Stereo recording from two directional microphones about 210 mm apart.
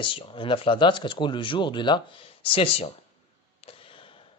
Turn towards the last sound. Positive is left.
turn(degrees=25)  # may be behind; listen again after turning